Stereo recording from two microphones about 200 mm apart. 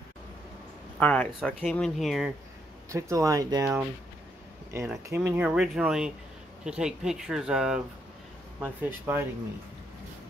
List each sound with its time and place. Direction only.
0.9 s speech: 5° left (ahead or behind)
2.9 s speech: 15° right (ahead or behind)
5.1 s speech: 10° right (ahead or behind)